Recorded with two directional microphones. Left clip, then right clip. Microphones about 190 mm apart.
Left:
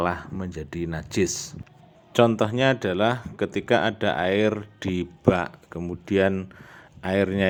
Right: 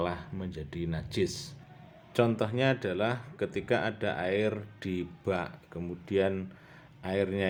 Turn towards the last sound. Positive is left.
turn(degrees=30)  # may be behind; listen again after turning